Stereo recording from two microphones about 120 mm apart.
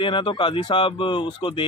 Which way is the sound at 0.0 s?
45° left (ahead or behind).